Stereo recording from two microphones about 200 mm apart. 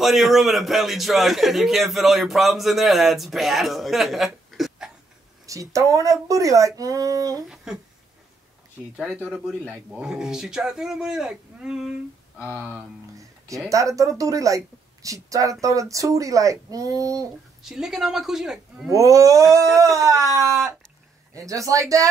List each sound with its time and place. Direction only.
0.0 s a man's voice: centre (ahead or behind)
5.5 s speech: 15° right (ahead or behind)
7.4 s a man's voice: centre (ahead or behind)
8.9 s a man's voice: 5° left (ahead or behind); by 17.3 s 15° right (ahead or behind)
17.6 s a man's voice: 5° right (ahead or behind)
18.9 s speech: 15° right (ahead or behind)